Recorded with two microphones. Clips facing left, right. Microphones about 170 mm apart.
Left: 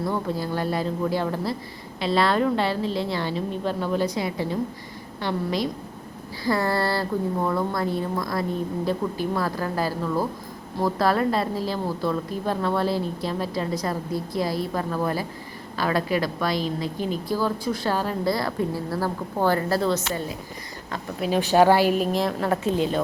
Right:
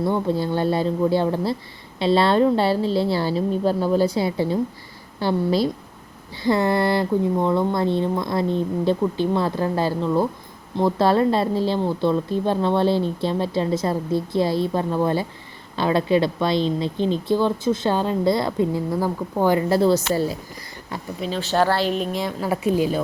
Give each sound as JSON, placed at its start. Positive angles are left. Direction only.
{"t": 0.0, "sound": "a woman's voice", "side_deg": -25}
{"t": 21.2, "sound": "speech", "side_deg": 10}